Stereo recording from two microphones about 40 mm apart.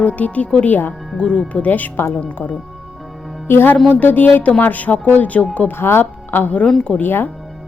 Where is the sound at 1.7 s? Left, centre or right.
Left.